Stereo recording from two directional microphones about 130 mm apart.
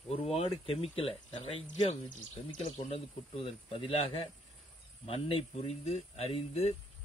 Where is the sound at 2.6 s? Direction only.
55° left (ahead or behind).